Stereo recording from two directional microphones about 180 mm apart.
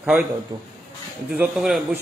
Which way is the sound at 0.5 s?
20° right (ahead or behind).